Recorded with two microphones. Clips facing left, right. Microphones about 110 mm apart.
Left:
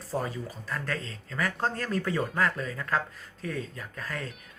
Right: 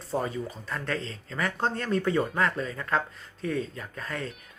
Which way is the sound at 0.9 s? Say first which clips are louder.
Right 2 dB; 30° right (ahead or behind).